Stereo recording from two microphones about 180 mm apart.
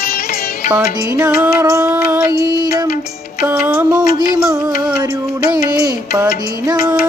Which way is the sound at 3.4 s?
5° right (ahead or behind).